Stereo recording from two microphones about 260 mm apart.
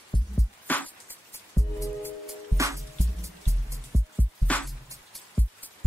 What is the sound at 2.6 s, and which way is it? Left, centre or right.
Music, centre.